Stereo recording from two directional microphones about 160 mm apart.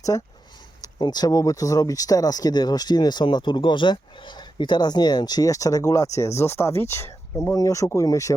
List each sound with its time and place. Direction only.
0.1 s speech: 20° left (ahead or behind)